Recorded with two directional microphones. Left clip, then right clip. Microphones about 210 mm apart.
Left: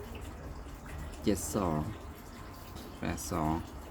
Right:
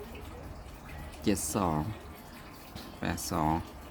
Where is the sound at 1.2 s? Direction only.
15° right (ahead or behind).